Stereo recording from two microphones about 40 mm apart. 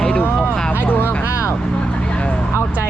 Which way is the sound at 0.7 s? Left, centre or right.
Left.